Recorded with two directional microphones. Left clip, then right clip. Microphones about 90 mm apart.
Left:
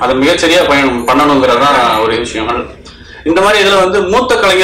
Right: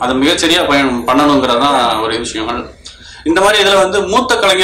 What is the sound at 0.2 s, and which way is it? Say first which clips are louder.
A man's voice: left 2 dB; 30° right (ahead or behind).